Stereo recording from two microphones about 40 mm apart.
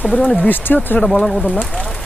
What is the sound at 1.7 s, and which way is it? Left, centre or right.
Rain on surface, left.